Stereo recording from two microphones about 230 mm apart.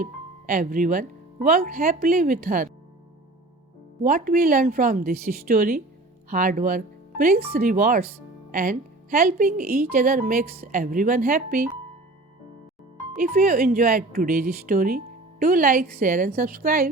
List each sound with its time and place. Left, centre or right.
0.0 s speech: right
4.0 s speech: right
13.1 s speech: right